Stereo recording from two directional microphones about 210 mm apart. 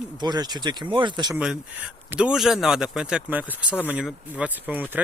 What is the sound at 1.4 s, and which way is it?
Speech, 5° right (ahead or behind).